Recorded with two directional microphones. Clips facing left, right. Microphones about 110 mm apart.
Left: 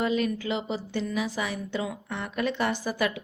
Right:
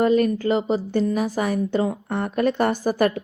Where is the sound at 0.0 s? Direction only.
45° right (ahead or behind).